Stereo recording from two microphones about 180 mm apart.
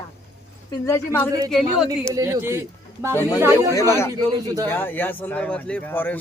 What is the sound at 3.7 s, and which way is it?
Speech, 15° left (ahead or behind).